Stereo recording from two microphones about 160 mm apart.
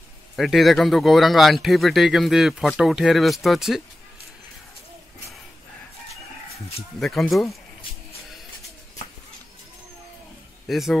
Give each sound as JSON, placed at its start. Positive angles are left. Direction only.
{"t": 0.4, "sound": "speech", "side_deg": 0}
{"t": 7.0, "sound": "speech", "side_deg": 0}
{"t": 10.7, "sound": "speech", "side_deg": 0}